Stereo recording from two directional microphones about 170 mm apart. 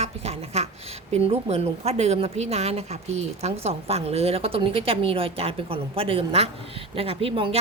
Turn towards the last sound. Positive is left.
turn(degrees=-30)  # may be behind; listen again after turning